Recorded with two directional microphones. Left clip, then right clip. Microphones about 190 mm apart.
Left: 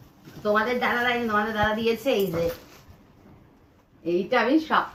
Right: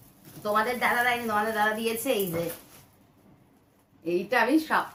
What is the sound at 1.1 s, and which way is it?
A woman's voice, 25° right (ahead or behind).